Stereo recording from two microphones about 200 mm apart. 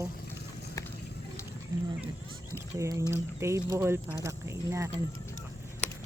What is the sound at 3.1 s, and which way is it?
Speech, 15° right (ahead or behind).